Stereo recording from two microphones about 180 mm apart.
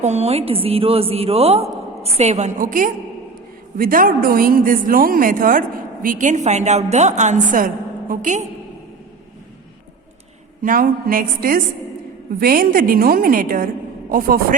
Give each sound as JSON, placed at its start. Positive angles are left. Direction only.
{"t": 0.0, "sound": "a woman's voice", "side_deg": -35}
{"t": 10.6, "sound": "a woman's voice", "side_deg": -50}